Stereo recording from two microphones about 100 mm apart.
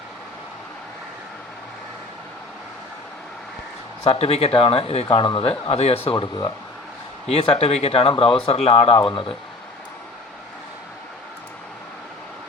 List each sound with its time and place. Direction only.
4.0 s speech: 80° left
5.0 s speech: 55° left (ahead or behind); by 6.0 s 85° left
7.3 s speech: 90° left; by 9.4 s 60° left (ahead or behind)